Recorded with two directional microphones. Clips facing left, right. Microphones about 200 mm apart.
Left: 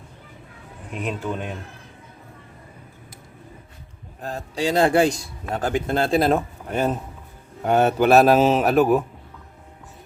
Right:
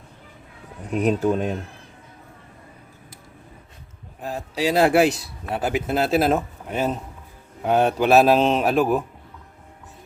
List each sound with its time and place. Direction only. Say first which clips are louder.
0.9 s speech: right 8 dB; 40° right (ahead or behind)
4.2 s a man's voice: right 1 dB; 5° right (ahead or behind)